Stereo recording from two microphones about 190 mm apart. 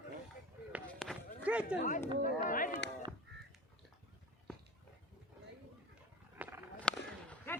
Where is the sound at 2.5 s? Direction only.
45° left (ahead or behind).